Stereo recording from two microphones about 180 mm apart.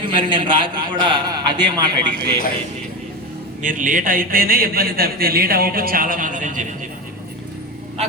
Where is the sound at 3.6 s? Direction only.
45° right (ahead or behind).